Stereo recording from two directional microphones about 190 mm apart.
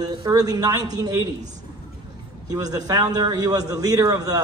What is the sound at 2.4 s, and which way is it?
A man's voice, 20° right (ahead or behind).